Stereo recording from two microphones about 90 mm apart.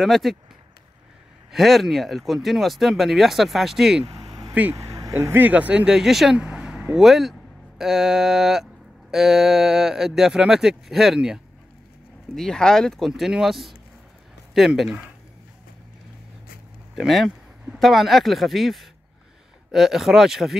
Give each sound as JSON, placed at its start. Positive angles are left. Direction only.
{"t": 0.0, "sound": "speech", "side_deg": 0}
{"t": 1.5, "sound": "speech", "side_deg": 0}
{"t": 4.1, "sound": "a sound", "side_deg": -45}
{"t": 4.7, "sound": "vehicle", "side_deg": -40}
{"t": 5.1, "sound": "speech", "side_deg": -25}
{"t": 12.4, "sound": "speech", "side_deg": 5}
{"t": 16.9, "sound": "speech", "side_deg": 0}